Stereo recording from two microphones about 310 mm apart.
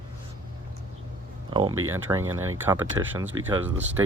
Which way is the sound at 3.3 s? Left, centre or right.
Centre.